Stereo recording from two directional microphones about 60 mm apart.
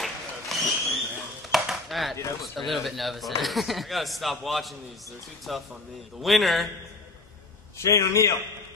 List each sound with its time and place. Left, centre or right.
0.0 s a sound: centre
1.5 s chopping: centre
2.5 s speech: centre
7.8 s a man's voice: left